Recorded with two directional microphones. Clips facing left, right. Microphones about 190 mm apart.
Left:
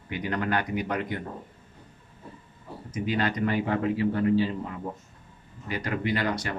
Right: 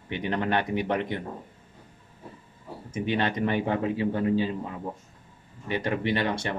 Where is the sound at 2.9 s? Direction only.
25° right (ahead or behind).